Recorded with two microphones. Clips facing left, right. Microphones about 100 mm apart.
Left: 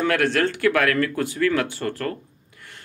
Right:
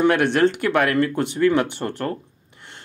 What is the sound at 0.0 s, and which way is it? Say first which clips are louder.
Speech: right 4 dB; 20° right (ahead or behind).